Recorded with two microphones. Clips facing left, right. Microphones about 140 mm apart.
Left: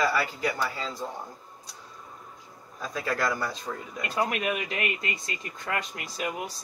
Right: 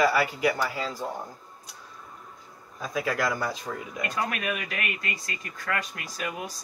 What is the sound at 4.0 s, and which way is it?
Speech, 20° left (ahead or behind).